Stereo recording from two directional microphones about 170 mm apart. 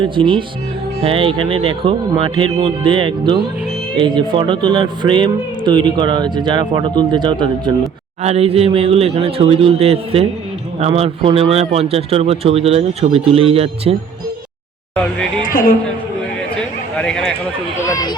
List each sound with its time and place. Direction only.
0.0 s speech: 30° right (ahead or behind)
15.4 s a man's voice: 55° left (ahead or behind)
17.0 s speech: 5° left (ahead or behind)
17.8 s speech: 20° left (ahead or behind)